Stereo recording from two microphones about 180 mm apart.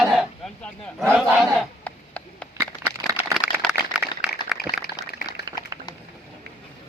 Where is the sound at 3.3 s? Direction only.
Centre (ahead or behind).